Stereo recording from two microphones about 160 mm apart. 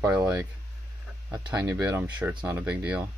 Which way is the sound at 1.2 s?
20° right (ahead or behind).